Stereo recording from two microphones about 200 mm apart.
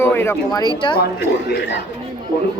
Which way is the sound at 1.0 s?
60° left (ahead or behind).